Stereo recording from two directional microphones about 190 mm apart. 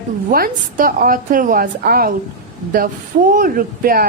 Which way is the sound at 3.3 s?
50° right (ahead or behind).